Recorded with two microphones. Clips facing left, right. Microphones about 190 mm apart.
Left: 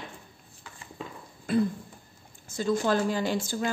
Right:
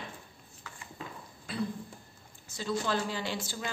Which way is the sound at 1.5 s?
50° left (ahead or behind).